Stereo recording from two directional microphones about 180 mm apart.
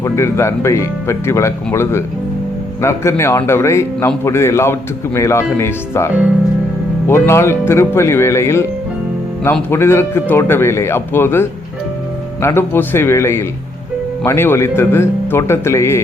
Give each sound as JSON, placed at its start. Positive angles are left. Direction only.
{"t": 0.0, "sound": "a man's voice", "side_deg": 15}
{"t": 7.1, "sound": "a man's voice", "side_deg": 15}